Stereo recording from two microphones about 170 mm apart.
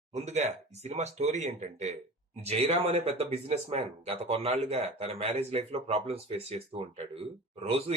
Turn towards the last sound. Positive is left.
turn(degrees=-35)  # may be behind; listen again after turning